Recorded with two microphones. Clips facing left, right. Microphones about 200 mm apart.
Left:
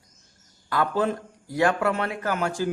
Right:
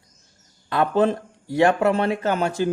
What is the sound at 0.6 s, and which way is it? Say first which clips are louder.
A man's voice: right 5 dB; 25° right (ahead or behind).